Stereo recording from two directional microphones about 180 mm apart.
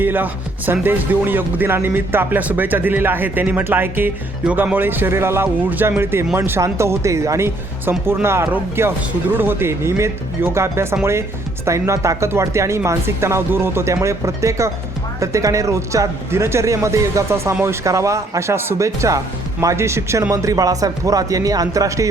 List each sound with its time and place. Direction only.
0.0 s a man's voice: 10° right (ahead or behind)